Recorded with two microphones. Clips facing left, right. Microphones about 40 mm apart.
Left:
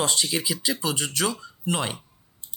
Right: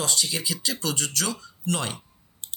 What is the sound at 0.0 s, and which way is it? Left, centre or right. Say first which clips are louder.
Speech: left 2 dB; left.